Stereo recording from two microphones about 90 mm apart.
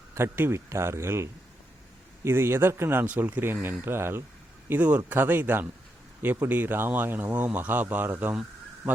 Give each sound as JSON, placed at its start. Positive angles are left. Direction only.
{"t": 0.1, "sound": "speech", "side_deg": -25}